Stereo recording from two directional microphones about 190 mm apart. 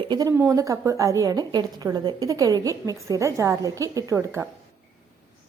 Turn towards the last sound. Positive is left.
turn(degrees=-15)  # may be behind; listen again after turning